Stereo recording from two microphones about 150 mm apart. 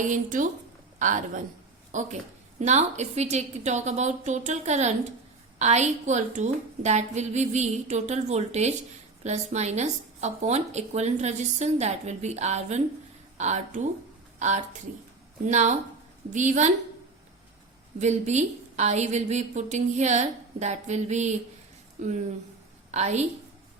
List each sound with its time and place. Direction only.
0.0 s a woman's voice: 60° right (ahead or behind)
18.0 s a woman's voice: 50° right (ahead or behind)
22.9 s a woman's voice: 50° right (ahead or behind)